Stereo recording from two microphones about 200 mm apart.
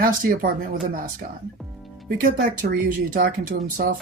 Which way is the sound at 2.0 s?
45° right (ahead or behind).